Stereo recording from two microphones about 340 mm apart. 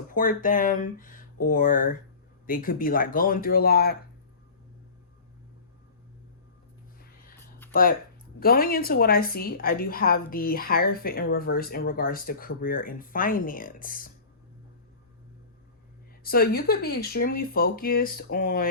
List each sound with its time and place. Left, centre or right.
0.1 s a woman's voice: left
7.7 s a woman's voice: left
16.2 s a woman's voice: left